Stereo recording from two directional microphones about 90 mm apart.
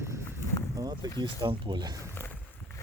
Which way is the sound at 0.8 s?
45° right (ahead or behind).